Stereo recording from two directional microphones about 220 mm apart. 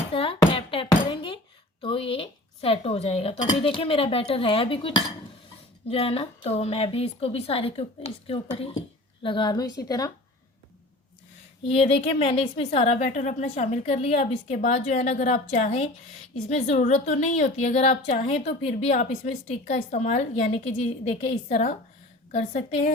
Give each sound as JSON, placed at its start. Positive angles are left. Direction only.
{"t": 0.1, "sound": "a sound", "side_deg": 25}
{"t": 1.8, "sound": "a woman's voice", "side_deg": 25}
{"t": 11.7, "sound": "a woman's voice", "side_deg": 25}